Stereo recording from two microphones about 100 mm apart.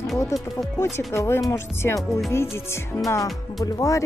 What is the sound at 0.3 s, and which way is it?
Speech, 30° left (ahead or behind).